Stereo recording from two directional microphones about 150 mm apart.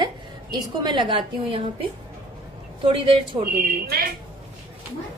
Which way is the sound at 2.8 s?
35° right (ahead or behind).